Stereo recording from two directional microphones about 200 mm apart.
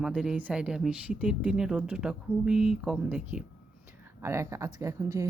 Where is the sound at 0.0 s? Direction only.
5° right (ahead or behind).